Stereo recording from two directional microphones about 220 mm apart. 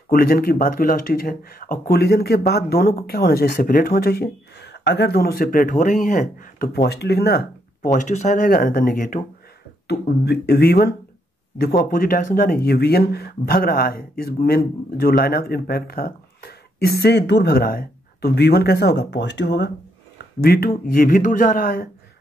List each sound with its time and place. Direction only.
0.1 s speech: 40° left (ahead or behind)